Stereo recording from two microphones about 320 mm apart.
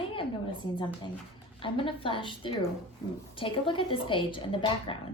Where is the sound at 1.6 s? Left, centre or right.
Centre.